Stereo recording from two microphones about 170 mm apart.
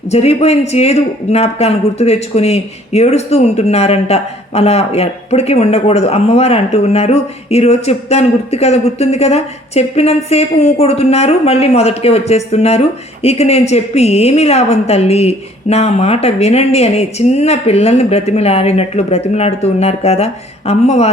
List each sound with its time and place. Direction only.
0.1 s speech: 40° left (ahead or behind)